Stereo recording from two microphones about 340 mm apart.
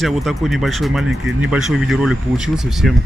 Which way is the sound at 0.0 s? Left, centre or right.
Centre.